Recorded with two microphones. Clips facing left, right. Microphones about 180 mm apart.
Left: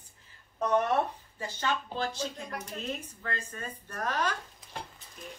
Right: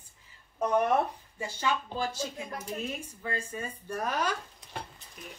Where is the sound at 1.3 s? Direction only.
10° right (ahead or behind).